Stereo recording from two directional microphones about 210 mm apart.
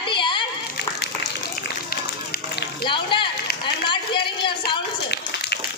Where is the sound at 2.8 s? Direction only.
25° left (ahead or behind).